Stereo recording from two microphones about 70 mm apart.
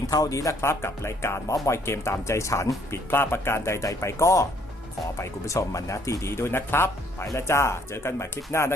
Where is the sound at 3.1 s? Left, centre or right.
Left.